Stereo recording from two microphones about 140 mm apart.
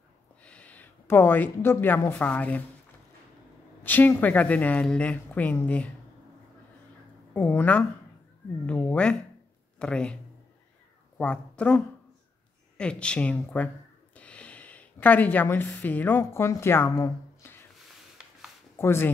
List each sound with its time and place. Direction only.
0.4 s speech: 10° left (ahead or behind)
3.8 s a woman's voice: 15° left (ahead or behind)
7.3 s a woman's voice: 10° left (ahead or behind)
11.1 s a woman's voice: 10° left (ahead or behind)
14.1 s a sound: 10° left (ahead or behind)
15.8 s a woman's voice: 10° left (ahead or behind)
18.8 s a woman's voice: 15° left (ahead or behind)